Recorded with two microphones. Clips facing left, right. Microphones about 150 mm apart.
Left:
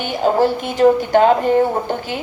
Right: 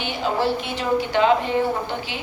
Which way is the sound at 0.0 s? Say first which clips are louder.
Left 7 dB; 45° left (ahead or behind).